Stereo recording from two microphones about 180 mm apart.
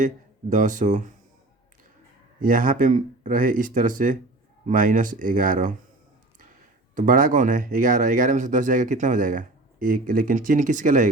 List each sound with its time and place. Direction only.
0.5 s speech: 45° right (ahead or behind)
2.4 s speech: 50° right (ahead or behind)
6.9 s speech: 45° right (ahead or behind)